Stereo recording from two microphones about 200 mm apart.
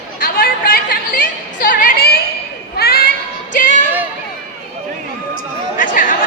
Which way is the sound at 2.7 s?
50° left (ahead or behind).